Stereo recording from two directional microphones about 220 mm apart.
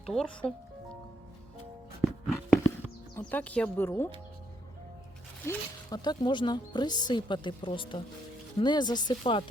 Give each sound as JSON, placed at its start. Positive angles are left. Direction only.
{"t": 0.0, "sound": "speech", "side_deg": 5}
{"t": 2.2, "sound": "a sound", "side_deg": 0}
{"t": 3.2, "sound": "speech", "side_deg": 5}
{"t": 5.5, "sound": "speech", "side_deg": 20}